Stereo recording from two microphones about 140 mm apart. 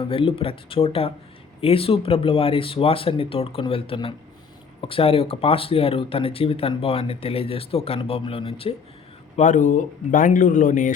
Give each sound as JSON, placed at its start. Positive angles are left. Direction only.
{"t": 0.0, "sound": "speech", "side_deg": 40}
{"t": 9.3, "sound": "speech", "side_deg": 60}